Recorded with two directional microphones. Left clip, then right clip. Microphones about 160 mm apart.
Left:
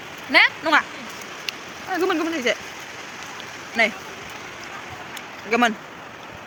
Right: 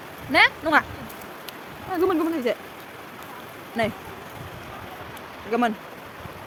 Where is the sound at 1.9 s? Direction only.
25° right (ahead or behind).